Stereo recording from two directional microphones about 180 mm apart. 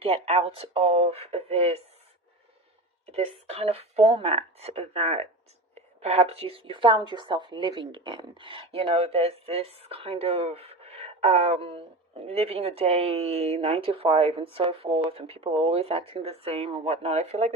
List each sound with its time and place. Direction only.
0.0 s speech: 35° right (ahead or behind)
3.1 s speech: 35° right (ahead or behind)